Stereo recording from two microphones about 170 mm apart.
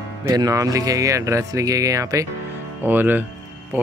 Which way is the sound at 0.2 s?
20° right (ahead or behind).